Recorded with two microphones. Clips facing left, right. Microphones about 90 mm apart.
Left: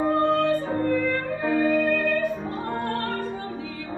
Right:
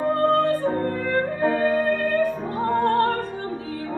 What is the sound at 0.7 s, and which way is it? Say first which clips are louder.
Music: even; 40° right (ahead or behind).